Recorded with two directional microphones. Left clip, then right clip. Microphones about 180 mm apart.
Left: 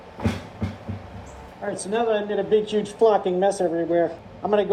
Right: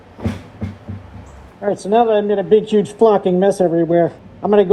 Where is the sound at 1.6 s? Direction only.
15° right (ahead or behind).